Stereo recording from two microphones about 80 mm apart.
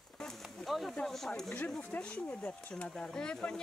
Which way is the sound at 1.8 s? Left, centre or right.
Centre.